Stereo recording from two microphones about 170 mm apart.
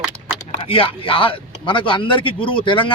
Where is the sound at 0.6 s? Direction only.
35° left (ahead or behind).